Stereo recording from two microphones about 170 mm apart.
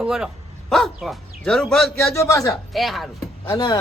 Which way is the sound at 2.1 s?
20° left (ahead or behind).